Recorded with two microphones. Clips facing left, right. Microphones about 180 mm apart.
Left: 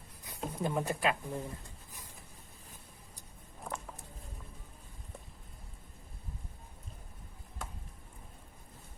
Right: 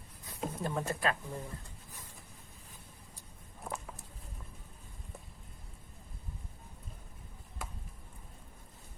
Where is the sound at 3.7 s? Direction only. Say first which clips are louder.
Even; 5° right (ahead or behind).